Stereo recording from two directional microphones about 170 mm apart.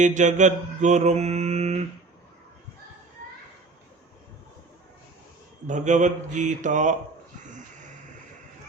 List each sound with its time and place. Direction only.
0.0 s mantra: 45° right (ahead or behind)
5.6 s speech: 45° right (ahead or behind)